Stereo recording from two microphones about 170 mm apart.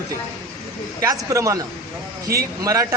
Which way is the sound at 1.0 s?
20° right (ahead or behind).